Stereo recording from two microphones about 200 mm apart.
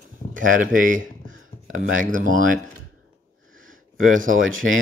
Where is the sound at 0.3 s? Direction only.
40° right (ahead or behind).